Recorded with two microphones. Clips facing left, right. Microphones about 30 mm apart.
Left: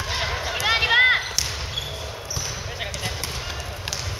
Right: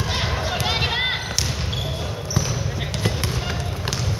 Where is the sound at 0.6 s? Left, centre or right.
Left.